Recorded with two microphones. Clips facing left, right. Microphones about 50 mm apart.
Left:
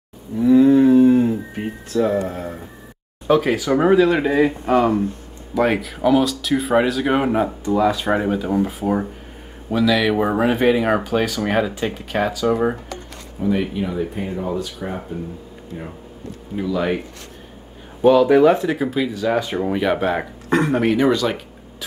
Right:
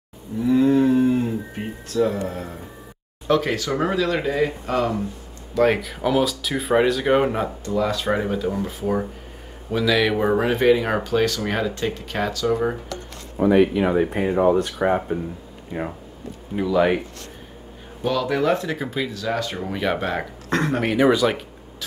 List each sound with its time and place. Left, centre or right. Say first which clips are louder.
0.4 s cattle: left 5 dB; centre
2.2 s speech: left 3 dB; centre
5.5 s speech: even; centre
13.4 s speech: right 5 dB; right
14.5 s speech: right 6 dB; right
16.5 s speech: right 2 dB; centre
18.0 s speech: left 9 dB; centre
19.1 s speech: left 5 dB; centre